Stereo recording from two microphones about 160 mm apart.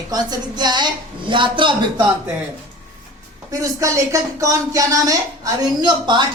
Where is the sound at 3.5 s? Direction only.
20° right (ahead or behind).